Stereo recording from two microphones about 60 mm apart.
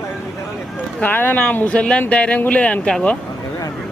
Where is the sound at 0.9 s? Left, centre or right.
Left.